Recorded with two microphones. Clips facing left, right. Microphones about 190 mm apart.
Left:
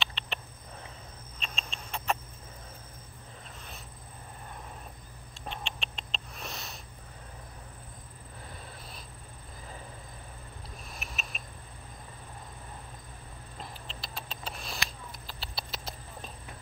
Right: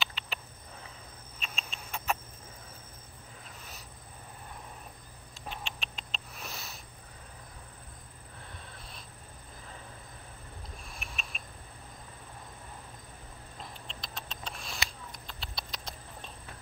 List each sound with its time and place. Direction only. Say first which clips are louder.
0.0 s a sound: left 1 dB; centre (ahead or behind)
1.4 s rodents: left 2 dB; 5° right (ahead or behind)
5.5 s rodents: left 2 dB; 5° right (ahead or behind)
10.9 s mechanisms: left 3 dB; centre (ahead or behind)
13.6 s sniff: left 2 dB; 5° left (ahead or behind)
15.2 s a sound: left 3 dB; 5° left (ahead or behind)